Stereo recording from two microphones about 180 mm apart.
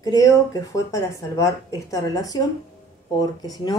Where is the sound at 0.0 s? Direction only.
20° left (ahead or behind).